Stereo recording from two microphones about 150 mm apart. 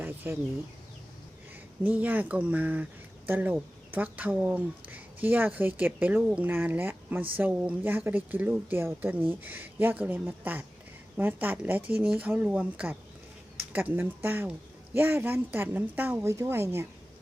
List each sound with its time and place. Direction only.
1.8 s speech: 10° right (ahead or behind)